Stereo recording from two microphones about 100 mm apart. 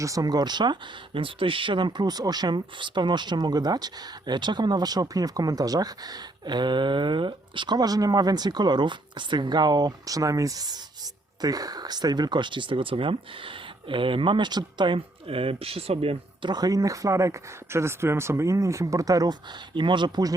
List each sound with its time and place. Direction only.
0.0 s speech: 35° right (ahead or behind); by 16.5 s 75° right (ahead or behind)
16.5 s speech: 40° right (ahead or behind)